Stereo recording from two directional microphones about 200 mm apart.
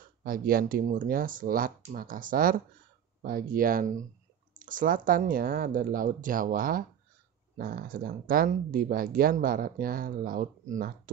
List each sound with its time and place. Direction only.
0.2 s speech: 45° right (ahead or behind)